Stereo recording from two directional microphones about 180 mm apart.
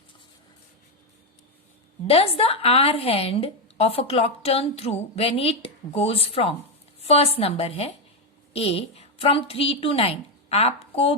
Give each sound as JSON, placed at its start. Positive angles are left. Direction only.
{"t": 2.0, "sound": "a woman's voice", "side_deg": 35}